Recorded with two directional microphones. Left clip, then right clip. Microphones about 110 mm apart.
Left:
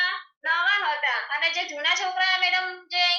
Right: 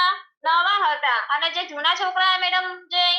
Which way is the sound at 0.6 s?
20° right (ahead or behind).